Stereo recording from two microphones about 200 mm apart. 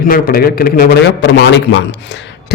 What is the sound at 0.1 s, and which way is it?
A man's voice, 50° left (ahead or behind).